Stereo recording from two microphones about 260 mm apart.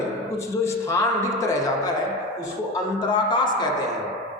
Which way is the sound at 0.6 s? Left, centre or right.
Centre.